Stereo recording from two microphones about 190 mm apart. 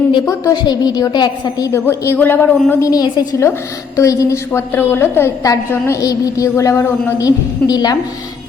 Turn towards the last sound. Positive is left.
turn(degrees=20)  # may be behind; listen again after turning